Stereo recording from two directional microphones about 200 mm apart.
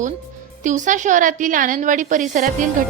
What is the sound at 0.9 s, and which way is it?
A woman's voice, 40° right (ahead or behind).